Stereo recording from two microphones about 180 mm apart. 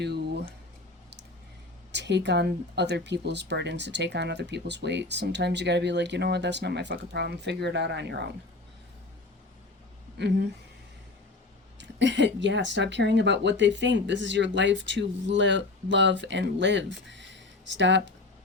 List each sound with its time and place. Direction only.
1.9 s speech: 75° right (ahead or behind)
11.8 s speech: 80° right